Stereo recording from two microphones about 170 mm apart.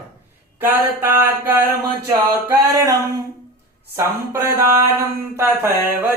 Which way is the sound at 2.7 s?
20° right (ahead or behind).